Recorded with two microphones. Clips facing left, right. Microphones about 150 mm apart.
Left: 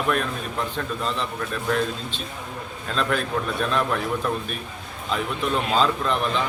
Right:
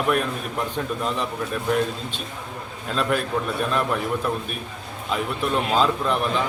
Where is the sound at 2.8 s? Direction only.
5° right (ahead or behind).